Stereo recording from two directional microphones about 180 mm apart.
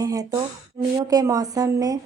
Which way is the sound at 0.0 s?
20° right (ahead or behind).